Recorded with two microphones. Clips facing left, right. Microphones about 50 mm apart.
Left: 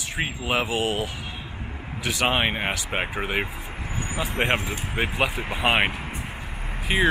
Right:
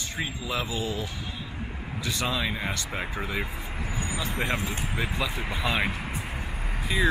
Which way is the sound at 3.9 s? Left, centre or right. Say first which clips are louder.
Left 5 dB; left.